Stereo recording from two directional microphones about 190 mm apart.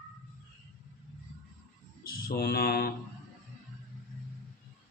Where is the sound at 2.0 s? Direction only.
50° left (ahead or behind).